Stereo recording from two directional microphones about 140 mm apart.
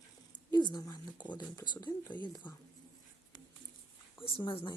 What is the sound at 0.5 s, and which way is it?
Speech, 30° left (ahead or behind).